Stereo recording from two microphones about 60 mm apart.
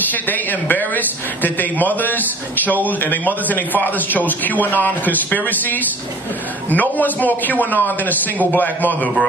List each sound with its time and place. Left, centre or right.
0.1 s a man's voice: left